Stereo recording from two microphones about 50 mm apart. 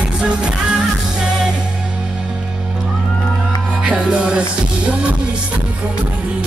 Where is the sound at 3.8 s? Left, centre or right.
Right.